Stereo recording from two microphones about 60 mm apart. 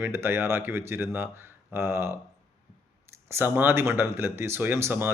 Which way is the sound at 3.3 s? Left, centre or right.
Right.